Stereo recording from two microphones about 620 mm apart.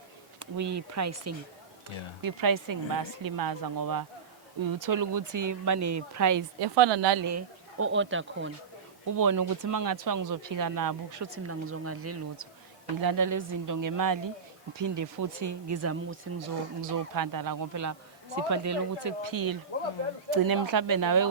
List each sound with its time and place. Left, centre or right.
0.3 s a woman's voice: right
7.3 s speech: right
9.1 s a woman's voice: right